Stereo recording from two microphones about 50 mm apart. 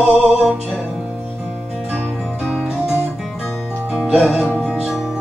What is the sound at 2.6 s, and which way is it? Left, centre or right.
Music, centre.